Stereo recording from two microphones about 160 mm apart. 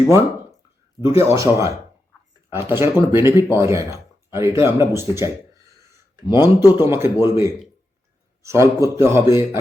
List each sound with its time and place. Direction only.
1.0 s speech: 20° right (ahead or behind)